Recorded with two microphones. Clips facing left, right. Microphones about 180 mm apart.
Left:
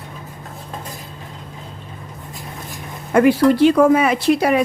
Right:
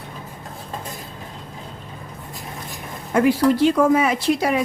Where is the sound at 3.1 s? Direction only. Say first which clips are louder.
Left 4 dB; 65° left (ahead or behind).